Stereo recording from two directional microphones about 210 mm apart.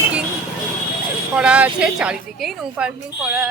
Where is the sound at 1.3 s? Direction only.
5° right (ahead or behind).